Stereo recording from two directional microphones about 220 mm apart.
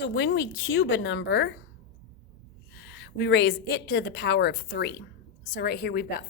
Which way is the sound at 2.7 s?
50° left (ahead or behind).